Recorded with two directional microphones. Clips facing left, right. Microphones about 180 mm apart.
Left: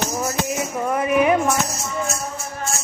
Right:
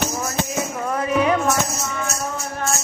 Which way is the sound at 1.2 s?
15° left (ahead or behind).